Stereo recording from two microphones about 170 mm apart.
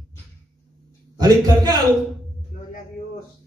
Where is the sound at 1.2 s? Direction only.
25° right (ahead or behind).